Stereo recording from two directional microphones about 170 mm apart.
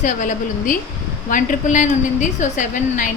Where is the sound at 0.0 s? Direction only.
50° left (ahead or behind).